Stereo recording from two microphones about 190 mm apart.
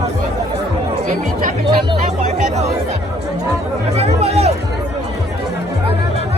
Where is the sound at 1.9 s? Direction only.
35° right (ahead or behind).